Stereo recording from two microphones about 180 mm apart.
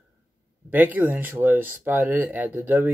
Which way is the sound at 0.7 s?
10° right (ahead or behind).